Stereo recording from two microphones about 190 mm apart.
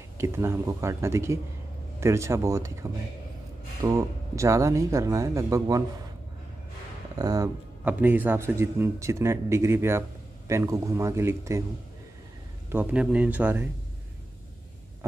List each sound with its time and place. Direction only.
0.2 s speech: 15° right (ahead or behind)
7.2 s speech: 20° right (ahead or behind)
12.7 s speech: 5° right (ahead or behind)